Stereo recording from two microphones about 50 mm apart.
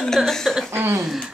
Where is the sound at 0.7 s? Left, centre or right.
Right.